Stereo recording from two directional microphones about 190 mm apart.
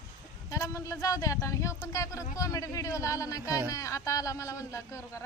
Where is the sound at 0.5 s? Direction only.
15° left (ahead or behind).